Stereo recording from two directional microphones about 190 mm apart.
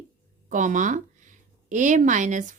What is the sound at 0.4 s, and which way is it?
Speech, 40° right (ahead or behind).